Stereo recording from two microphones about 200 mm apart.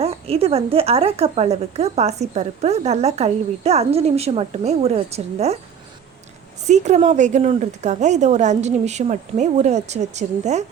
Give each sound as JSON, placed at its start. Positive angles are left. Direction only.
{"t": 0.0, "sound": "speech", "side_deg": -30}
{"t": 6.7, "sound": "speech", "side_deg": -35}